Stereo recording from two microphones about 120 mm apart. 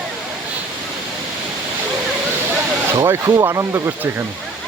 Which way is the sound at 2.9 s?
25° right (ahead or behind).